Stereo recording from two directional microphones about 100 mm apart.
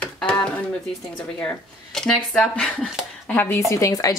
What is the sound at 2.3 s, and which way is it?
Speech, 10° left (ahead or behind).